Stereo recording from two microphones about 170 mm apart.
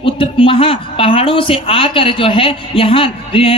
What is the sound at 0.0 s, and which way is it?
Speech, 30° left (ahead or behind).